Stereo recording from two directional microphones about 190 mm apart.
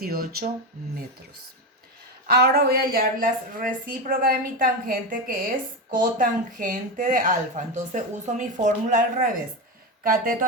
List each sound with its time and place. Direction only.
0.0 s speech: 55° right (ahead or behind)
2.3 s speech: 55° right (ahead or behind)